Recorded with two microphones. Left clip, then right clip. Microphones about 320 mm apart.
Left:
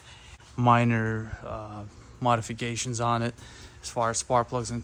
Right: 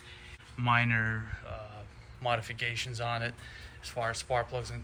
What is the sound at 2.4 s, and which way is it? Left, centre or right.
Speech, centre.